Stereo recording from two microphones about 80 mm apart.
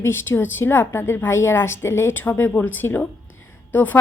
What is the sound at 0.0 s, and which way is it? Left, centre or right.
Speech, left.